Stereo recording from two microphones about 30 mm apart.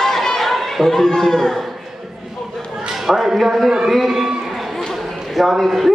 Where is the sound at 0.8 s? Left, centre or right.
Left.